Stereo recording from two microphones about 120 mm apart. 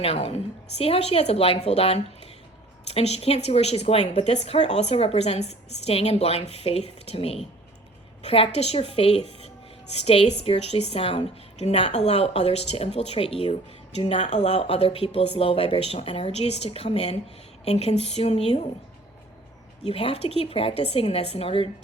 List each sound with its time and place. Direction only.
0.0 s a woman's voice: 55° left (ahead or behind)
19.8 s a woman's voice: 50° left (ahead or behind)